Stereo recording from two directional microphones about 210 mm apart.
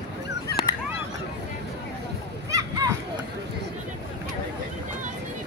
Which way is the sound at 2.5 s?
15° right (ahead or behind).